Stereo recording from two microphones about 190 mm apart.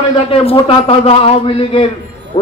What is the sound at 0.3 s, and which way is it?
A man's voice, 30° left (ahead or behind).